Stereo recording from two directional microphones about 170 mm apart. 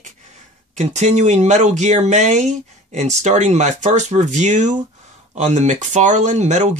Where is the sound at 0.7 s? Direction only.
45° right (ahead or behind).